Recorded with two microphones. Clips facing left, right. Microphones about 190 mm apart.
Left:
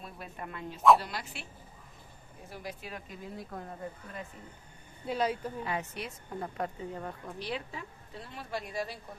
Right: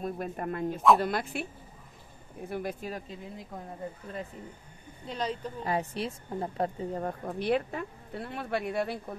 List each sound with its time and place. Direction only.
0.0 s speech: 45° right (ahead or behind)
2.5 s speech: 50° right (ahead or behind)
3.1 s speech: 20° right (ahead or behind)
5.0 s speech: 10° left (ahead or behind)
5.6 s a woman's voice: 35° right (ahead or behind)
7.2 s speech: 55° right (ahead or behind)